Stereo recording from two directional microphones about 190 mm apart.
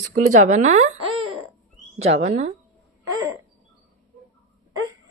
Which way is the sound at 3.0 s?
15° right (ahead or behind).